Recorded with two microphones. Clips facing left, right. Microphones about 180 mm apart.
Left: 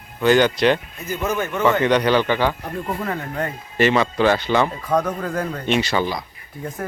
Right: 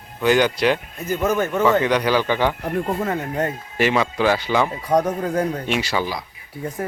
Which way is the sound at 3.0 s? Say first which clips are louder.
Right 3 dB; 20° right (ahead or behind).